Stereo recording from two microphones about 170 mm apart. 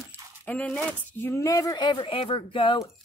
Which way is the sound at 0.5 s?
5° left (ahead or behind).